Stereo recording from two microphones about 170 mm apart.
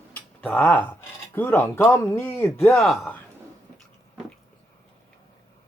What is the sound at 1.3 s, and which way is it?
Speech, 10° left (ahead or behind).